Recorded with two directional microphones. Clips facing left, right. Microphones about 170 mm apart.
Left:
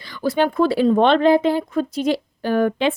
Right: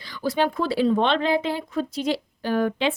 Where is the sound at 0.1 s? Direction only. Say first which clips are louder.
Left 4 dB; 55° left (ahead or behind).